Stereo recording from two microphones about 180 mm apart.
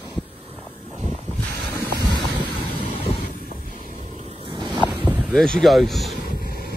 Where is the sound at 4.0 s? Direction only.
40° right (ahead or behind).